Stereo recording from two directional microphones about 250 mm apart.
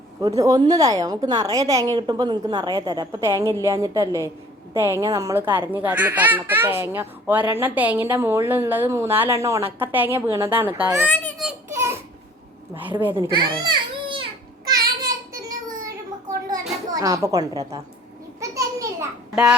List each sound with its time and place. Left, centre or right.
0.2 s a child's voice: centre
11.1 s crying: centre
13.1 s baby cry: centre
14.7 s child singing: centre
16.9 s a child's voice: centre
18.3 s a sound: centre